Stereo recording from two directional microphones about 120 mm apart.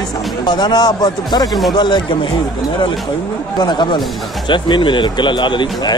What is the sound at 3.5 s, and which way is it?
A man's voice, 40° left (ahead or behind).